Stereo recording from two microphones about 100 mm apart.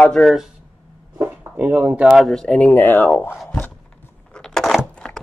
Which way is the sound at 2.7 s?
20° left (ahead or behind).